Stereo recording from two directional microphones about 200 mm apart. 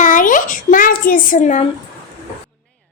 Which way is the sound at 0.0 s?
40° left (ahead or behind).